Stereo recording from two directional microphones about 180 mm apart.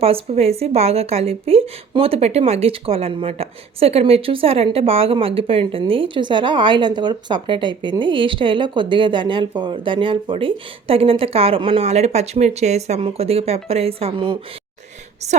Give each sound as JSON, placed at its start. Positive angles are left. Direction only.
{"t": 0.0, "sound": "a woman's voice", "side_deg": -35}